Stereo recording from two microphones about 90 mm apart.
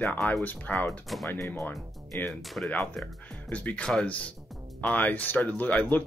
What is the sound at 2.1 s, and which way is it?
Speech, 20° left (ahead or behind).